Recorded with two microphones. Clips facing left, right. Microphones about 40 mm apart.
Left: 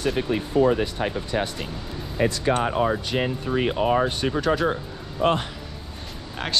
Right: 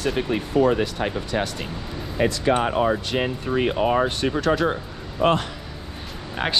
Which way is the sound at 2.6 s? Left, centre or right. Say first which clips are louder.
Right 2 dB; right.